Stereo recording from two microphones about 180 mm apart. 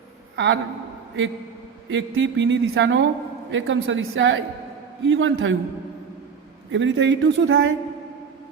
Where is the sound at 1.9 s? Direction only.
85° right.